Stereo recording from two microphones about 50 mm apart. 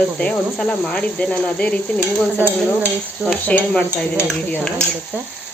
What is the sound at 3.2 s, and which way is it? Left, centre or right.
Speech, centre.